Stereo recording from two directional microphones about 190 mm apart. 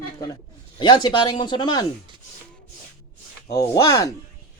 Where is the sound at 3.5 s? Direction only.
20° left (ahead or behind).